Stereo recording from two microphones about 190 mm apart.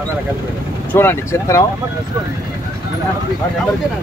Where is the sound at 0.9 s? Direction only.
15° left (ahead or behind).